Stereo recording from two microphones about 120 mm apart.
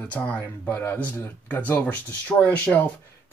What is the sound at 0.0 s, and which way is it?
Speech, 10° left (ahead or behind).